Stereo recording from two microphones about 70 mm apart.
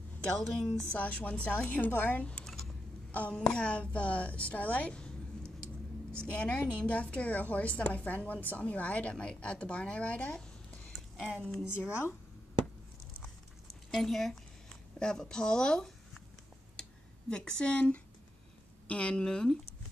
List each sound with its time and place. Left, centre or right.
0.2 s a woman's voice: centre
0.9 s a woman's voice: left
6.3 s a woman's voice: centre
11.9 s speech: left
13.9 s a woman's voice: centre
16.8 s a sound: centre
17.3 s a woman's voice: centre